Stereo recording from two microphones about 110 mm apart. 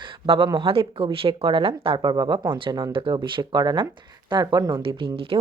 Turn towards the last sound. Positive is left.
turn(degrees=-50)  # may be behind; listen again after turning